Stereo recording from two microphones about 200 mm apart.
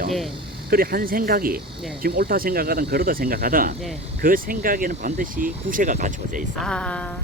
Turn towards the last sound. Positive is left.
turn(degrees=5)  # may be behind; listen again after turning